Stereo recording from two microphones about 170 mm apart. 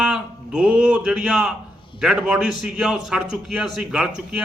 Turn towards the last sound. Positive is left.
turn(degrees=-5)  # may be behind; listen again after turning